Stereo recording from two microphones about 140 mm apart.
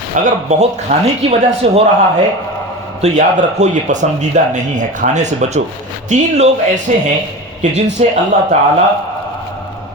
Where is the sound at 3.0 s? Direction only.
60° right (ahead or behind).